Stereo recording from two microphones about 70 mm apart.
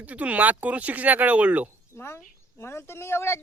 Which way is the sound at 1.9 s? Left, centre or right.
Left.